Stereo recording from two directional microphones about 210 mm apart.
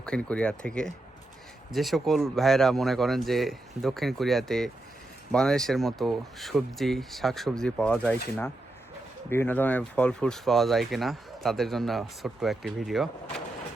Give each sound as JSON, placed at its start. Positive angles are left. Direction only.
{"t": 0.0, "sound": "speech", "side_deg": 5}